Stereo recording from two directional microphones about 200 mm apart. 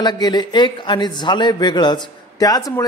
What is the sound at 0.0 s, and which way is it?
A man's voice, 20° left (ahead or behind).